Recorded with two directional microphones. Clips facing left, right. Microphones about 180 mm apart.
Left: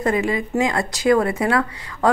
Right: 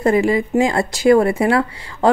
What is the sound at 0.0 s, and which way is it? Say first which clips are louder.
Speech: right 5 dB; 30° right (ahead or behind).